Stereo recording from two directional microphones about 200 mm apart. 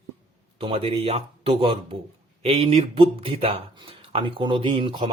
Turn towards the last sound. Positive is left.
turn(degrees=-25)  # may be behind; listen again after turning